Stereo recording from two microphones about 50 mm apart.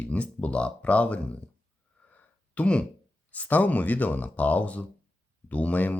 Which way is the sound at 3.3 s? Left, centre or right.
Left.